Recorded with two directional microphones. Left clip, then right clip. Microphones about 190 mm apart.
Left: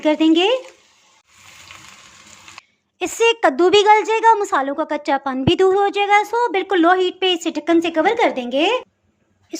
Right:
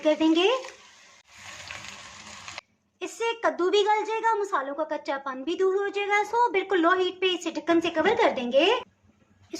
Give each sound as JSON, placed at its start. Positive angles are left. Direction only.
{"t": 0.0, "sound": "a woman's voice", "side_deg": 35}
{"t": 3.0, "sound": "a woman's voice", "side_deg": 40}
{"t": 9.5, "sound": "a sound", "side_deg": 30}